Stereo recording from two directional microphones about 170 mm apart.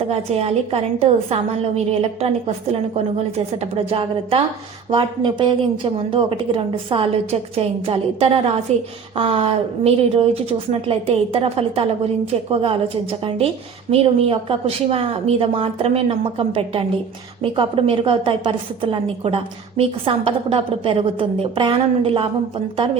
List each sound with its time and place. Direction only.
0.1 s a woman's voice: 35° right (ahead or behind)